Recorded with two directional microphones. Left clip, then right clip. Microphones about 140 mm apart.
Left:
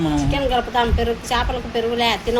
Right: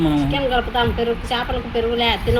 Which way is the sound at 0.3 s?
10° left (ahead or behind).